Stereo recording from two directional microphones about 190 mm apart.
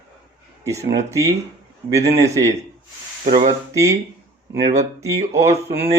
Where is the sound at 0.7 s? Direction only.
15° right (ahead or behind).